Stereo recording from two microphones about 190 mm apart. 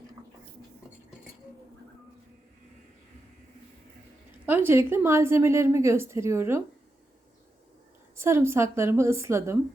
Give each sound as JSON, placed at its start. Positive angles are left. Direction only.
{"t": 4.4, "sound": "a woman's voice", "side_deg": -10}
{"t": 8.1, "sound": "a woman's voice", "side_deg": -15}